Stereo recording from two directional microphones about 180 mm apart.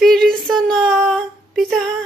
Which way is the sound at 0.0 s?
Centre (ahead or behind).